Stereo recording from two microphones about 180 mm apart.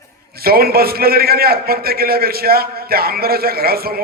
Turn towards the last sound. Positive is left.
turn(degrees=-55)  # may be behind; listen again after turning